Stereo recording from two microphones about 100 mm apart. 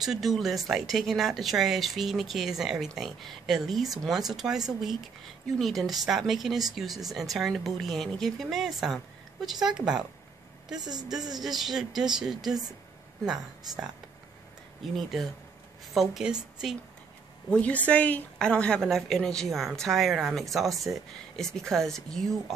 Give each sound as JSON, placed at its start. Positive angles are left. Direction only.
{"t": 0.0, "sound": "speech", "side_deg": 0}
{"t": 10.8, "sound": "a woman's voice", "side_deg": -40}
{"t": 11.4, "sound": "a woman's voice", "side_deg": -5}
{"t": 17.6, "sound": "speech", "side_deg": 15}